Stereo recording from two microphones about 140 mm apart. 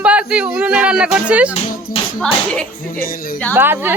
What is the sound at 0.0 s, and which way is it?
Speech, 10° right (ahead or behind).